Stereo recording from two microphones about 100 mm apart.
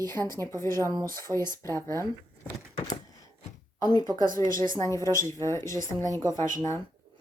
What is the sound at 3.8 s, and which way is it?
A woman's voice, 45° left (ahead or behind).